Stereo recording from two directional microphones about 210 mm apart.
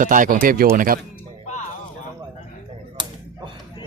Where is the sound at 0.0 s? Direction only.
40° right (ahead or behind).